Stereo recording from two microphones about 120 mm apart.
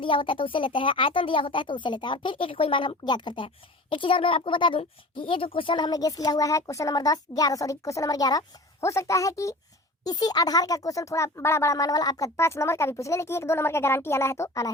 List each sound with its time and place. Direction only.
0.0 s a child's voice: 45° left (ahead or behind); by 14.7 s 25° left (ahead or behind)